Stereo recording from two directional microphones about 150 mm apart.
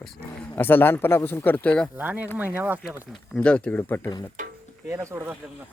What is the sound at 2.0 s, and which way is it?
Speech, 10° right (ahead or behind).